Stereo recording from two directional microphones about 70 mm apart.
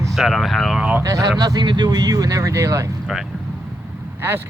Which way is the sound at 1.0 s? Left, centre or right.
Right.